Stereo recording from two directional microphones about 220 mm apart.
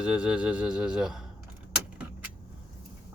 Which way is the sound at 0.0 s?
5° right (ahead or behind).